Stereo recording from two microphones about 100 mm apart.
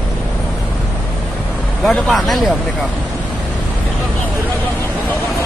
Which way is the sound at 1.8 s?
Centre (ahead or behind).